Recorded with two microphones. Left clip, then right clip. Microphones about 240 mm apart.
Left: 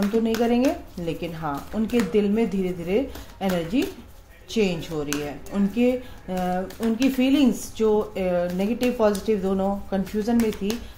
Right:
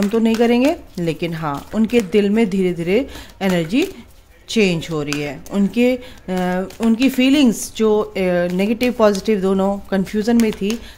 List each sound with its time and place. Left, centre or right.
0.7 s speech: right